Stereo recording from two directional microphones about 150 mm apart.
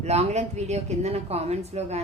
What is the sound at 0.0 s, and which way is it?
Speech, 45° right (ahead or behind).